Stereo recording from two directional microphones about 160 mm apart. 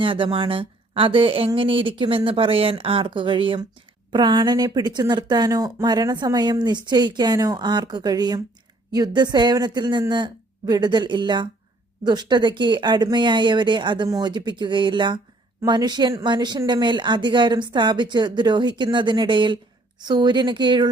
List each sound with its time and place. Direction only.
0.0 s speech: 35° right (ahead or behind)